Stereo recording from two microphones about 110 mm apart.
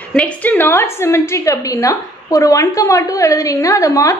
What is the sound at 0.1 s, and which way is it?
A woman's voice, 10° left (ahead or behind).